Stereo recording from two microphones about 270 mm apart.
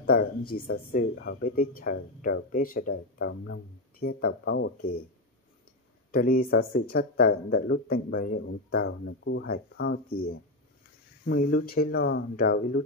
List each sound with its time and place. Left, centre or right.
0.0 s speech: left
6.1 s speech: left
8.8 s speech: left